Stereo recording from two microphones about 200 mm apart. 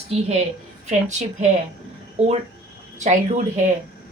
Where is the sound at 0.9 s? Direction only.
35° right (ahead or behind).